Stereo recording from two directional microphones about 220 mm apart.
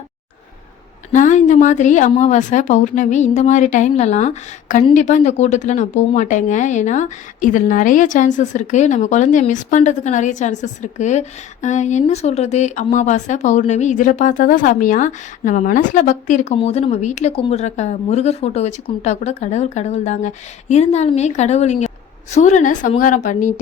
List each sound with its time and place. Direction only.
1.1 s speech: 35° left (ahead or behind)